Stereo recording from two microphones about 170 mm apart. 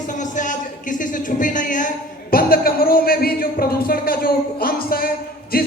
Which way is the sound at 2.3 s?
60° left (ahead or behind).